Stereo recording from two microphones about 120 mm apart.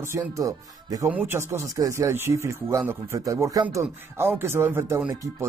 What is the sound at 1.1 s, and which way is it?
Speech, 15° right (ahead or behind).